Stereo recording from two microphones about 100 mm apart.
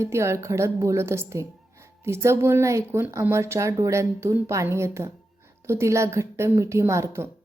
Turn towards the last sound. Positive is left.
turn(degrees=-30)  # may be behind; listen again after turning